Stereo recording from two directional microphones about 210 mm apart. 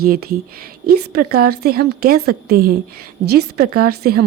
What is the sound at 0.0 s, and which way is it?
A woman's voice, 45° right (ahead or behind).